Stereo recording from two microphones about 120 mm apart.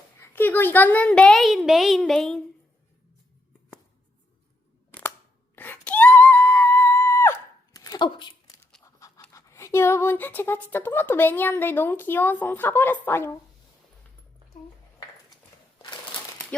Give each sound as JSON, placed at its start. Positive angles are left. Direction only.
{"t": 0.2, "sound": "a child's voice", "side_deg": 15}
{"t": 5.5, "sound": "screaming", "side_deg": 15}
{"t": 7.7, "sound": "a sound", "side_deg": 35}
{"t": 8.8, "sound": "scratch", "side_deg": 25}
{"t": 9.3, "sound": "speech", "side_deg": 25}